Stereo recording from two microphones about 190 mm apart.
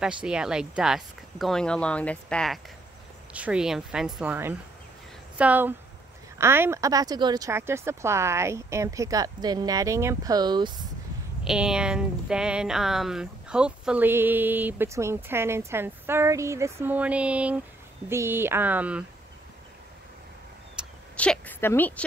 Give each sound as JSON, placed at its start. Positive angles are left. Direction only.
{"t": 0.0, "sound": "speech", "side_deg": -5}
{"t": 11.4, "sound": "speech", "side_deg": -5}
{"t": 20.8, "sound": "a sound", "side_deg": -5}
{"t": 21.2, "sound": "speech", "side_deg": 10}